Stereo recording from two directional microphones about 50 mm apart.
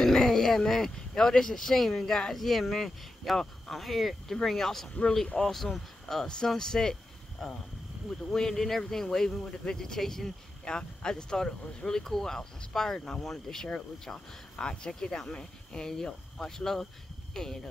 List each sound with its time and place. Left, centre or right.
0.0 s speech: centre
4.8 s speech: centre
5.4 s speech: centre